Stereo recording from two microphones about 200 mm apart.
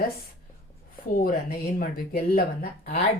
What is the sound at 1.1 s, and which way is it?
A woman's voice, 45° left (ahead or behind).